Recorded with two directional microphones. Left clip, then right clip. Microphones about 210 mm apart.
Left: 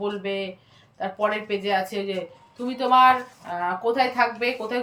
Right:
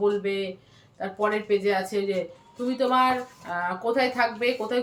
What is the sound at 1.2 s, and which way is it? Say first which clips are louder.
Speech: right 1 dB; 5° left (ahead or behind).